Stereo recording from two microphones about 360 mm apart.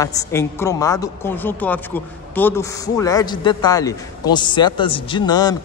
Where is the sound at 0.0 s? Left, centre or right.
Centre.